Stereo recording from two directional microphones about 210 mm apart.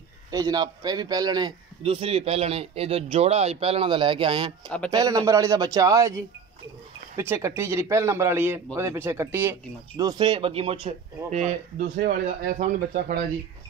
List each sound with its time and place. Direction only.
0.3 s a man's voice: 15° right (ahead or behind)
4.6 s speech: 5° left (ahead or behind)
4.9 s a man's voice: 15° right (ahead or behind); by 13.2 s 40° right (ahead or behind)